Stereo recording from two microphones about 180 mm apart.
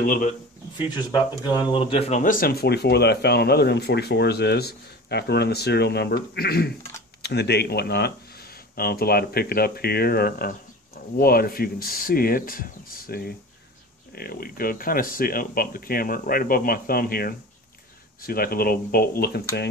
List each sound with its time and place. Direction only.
0.0 s speech: 50° left (ahead or behind)
0.8 s speech: 25° left (ahead or behind); by 19.7 s 60° left (ahead or behind)